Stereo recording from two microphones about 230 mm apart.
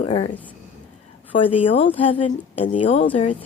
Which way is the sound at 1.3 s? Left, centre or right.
Left.